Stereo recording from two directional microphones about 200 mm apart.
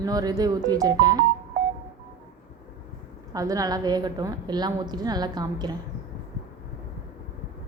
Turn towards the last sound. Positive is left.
turn(degrees=-20)  # may be behind; listen again after turning